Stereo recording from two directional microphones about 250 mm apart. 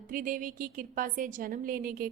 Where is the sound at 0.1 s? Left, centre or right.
Right.